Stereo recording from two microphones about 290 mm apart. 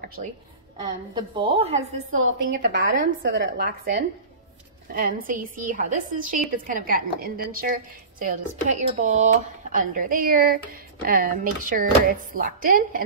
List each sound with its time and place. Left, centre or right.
0.8 s a woman's voice: centre
2.4 s a woman's voice: right
4.9 s a woman's voice: right